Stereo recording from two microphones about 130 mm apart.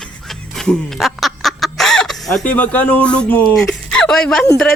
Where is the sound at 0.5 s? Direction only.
Centre (ahead or behind).